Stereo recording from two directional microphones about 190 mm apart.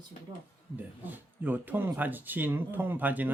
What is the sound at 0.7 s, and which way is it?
Speech, 10° right (ahead or behind).